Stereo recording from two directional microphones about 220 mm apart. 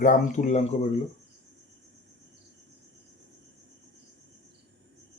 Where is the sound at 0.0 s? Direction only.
30° left (ahead or behind).